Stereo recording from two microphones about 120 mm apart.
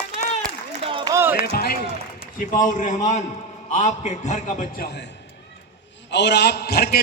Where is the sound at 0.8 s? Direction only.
45° right (ahead or behind).